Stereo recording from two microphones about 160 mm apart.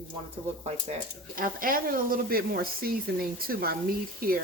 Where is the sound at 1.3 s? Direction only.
60° right (ahead or behind).